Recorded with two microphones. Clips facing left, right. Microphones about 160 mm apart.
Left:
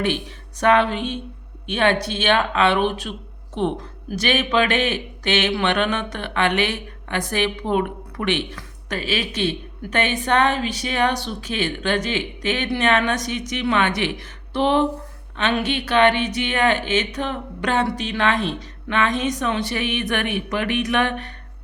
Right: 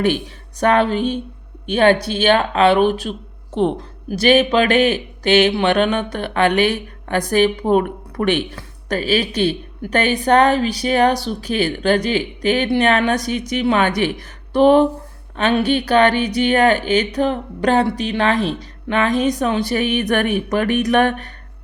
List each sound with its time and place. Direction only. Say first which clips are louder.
0.6 s speech: right 2 dB; 35° right (ahead or behind)